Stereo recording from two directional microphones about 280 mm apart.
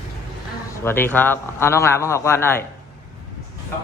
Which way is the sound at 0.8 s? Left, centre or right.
Centre.